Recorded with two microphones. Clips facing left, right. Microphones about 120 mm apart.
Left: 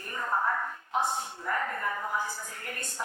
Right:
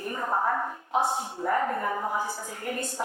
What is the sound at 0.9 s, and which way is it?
A woman's voice, 30° right (ahead or behind).